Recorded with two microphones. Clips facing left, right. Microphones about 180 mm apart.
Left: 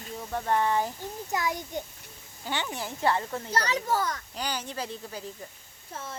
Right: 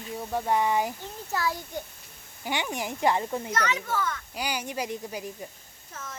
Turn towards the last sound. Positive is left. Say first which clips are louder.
# left 2 dB
turn(degrees=30)  # may be behind; listen again after turning